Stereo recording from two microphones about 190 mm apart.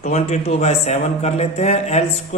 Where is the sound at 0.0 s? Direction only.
35° left (ahead or behind).